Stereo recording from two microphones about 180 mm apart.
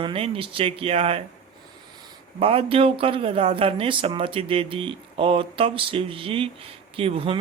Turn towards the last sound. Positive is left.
turn(degrees=-30)  # may be behind; listen again after turning